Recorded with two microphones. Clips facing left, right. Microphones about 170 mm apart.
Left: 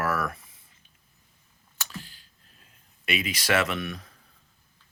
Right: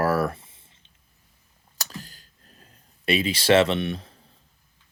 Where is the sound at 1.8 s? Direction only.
40° right (ahead or behind).